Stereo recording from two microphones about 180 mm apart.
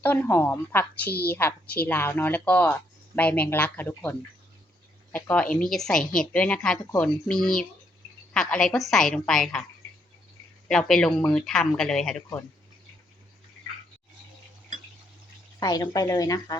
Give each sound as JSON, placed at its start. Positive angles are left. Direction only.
{"t": 0.0, "sound": "a woman's voice", "side_deg": 10}
{"t": 10.7, "sound": "a woman's voice", "side_deg": 5}
{"t": 15.6, "sound": "speech", "side_deg": 20}